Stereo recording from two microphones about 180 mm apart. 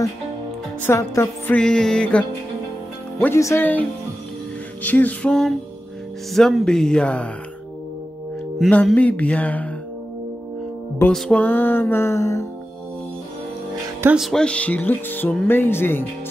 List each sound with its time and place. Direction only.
0.8 s speech: 15° left (ahead or behind)
1.6 s speech: 5° left (ahead or behind)
4.8 s speech: 10° left (ahead or behind)
8.5 s speech: 5° left (ahead or behind)
11.0 s speech: 5° left (ahead or behind)
14.0 s speech: centre (ahead or behind)